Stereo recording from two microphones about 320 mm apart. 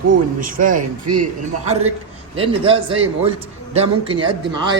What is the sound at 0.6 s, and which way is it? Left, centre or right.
A man's voice, right.